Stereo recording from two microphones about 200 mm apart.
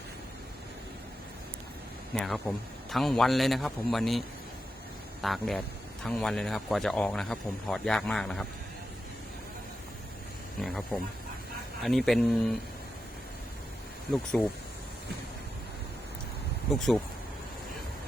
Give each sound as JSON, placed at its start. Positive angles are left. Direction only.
{"t": 2.1, "sound": "a man's voice", "side_deg": 0}
{"t": 5.2, "sound": "a man's voice", "side_deg": 0}
{"t": 10.6, "sound": "a man's voice", "side_deg": 0}
{"t": 16.7, "sound": "a man's voice", "side_deg": 0}